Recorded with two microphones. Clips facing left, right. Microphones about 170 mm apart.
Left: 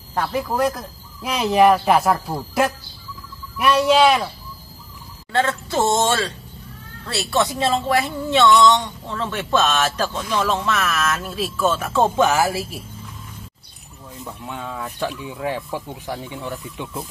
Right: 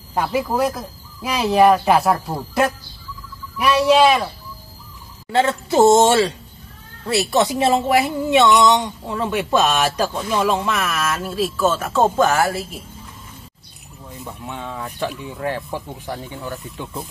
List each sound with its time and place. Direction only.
0.1 s speech: 10° right (ahead or behind)
5.3 s a woman's voice: 20° right (ahead or behind); by 12.8 s 5° left (ahead or behind)
14.2 s speech: centre (ahead or behind)